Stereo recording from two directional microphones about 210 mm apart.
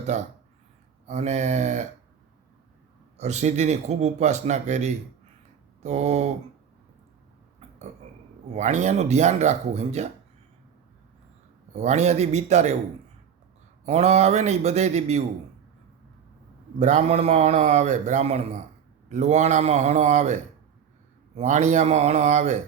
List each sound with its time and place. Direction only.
0.0 s speech: 35° right (ahead or behind)
3.2 s speech: 35° right (ahead or behind)
7.6 s a sound: 30° right (ahead or behind)
8.5 s speech: 35° right (ahead or behind)
11.7 s speech: 30° right (ahead or behind)
13.8 s speech: 30° right (ahead or behind)
16.8 s speech: 35° right (ahead or behind)